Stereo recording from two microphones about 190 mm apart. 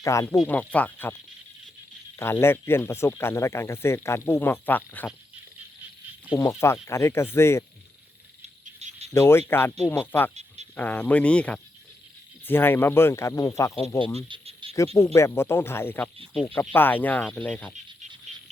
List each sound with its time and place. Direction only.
0.0 s speech: 15° left (ahead or behind)
2.1 s speech: 15° left (ahead or behind)
6.3 s speech: 15° left (ahead or behind)
8.8 s cricket: 35° right (ahead or behind)
9.1 s speech: 15° left (ahead or behind)
14.3 s a sound: 25° right (ahead or behind)
14.9 s speech: 15° left (ahead or behind)
16.3 s speech: centre (ahead or behind)